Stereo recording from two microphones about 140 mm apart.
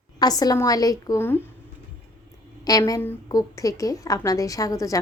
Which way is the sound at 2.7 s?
25° left (ahead or behind).